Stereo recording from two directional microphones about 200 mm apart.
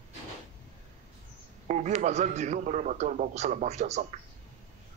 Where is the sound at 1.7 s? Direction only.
35° right (ahead or behind).